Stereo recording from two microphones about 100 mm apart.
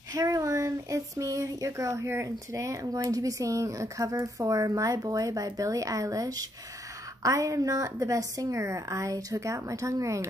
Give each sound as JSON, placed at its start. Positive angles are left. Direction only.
{"t": 0.1, "sound": "speech", "side_deg": -35}